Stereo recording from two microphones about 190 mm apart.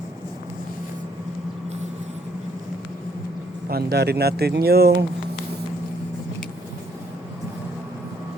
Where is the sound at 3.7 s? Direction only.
55° right (ahead or behind).